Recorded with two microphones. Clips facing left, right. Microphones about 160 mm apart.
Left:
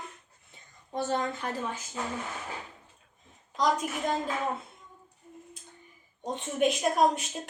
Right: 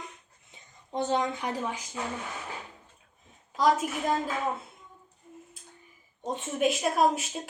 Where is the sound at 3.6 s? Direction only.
5° right (ahead or behind).